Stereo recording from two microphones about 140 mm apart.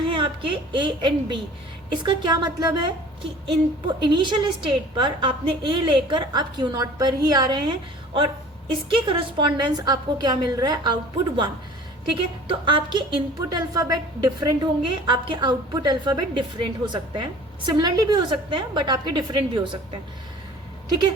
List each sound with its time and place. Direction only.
0.7 s a woman's voice: 35° right (ahead or behind)